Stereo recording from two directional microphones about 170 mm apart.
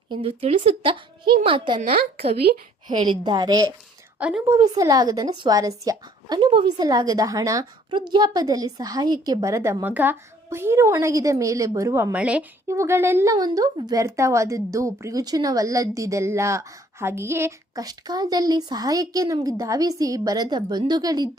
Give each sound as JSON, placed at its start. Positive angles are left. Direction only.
{"t": 0.1, "sound": "speech", "side_deg": -35}
{"t": 1.8, "sound": "a woman's voice", "side_deg": -65}
{"t": 3.1, "sound": "speech", "side_deg": -25}
{"t": 4.2, "sound": "a woman's voice", "side_deg": -5}
{"t": 4.4, "sound": "speech", "side_deg": -20}
{"t": 12.1, "sound": "speech", "side_deg": -5}